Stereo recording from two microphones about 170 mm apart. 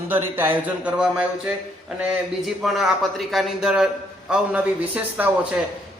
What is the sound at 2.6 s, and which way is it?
A man's voice, centre (ahead or behind).